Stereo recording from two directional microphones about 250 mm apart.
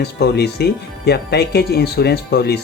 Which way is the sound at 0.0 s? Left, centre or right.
Left.